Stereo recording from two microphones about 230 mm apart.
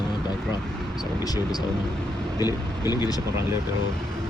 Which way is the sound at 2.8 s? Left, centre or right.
Centre.